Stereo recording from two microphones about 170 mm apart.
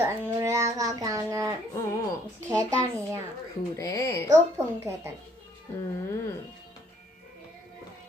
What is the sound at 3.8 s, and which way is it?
Speech, 20° left (ahead or behind).